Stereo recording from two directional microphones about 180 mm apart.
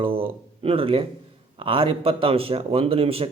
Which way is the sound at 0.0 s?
30° right (ahead or behind).